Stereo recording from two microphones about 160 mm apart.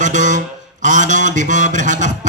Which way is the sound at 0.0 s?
50° right (ahead or behind).